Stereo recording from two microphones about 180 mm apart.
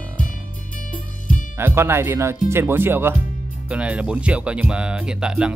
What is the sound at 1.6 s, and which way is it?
Speech, 15° right (ahead or behind).